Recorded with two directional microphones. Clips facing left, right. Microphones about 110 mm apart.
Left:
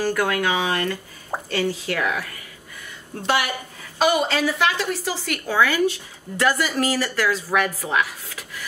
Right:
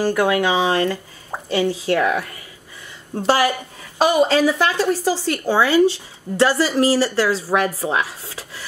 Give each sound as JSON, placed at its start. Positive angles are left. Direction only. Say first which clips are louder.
{"t": 0.0, "sound": "a woman's voice", "louder": "right 4 dB", "side_deg": -20}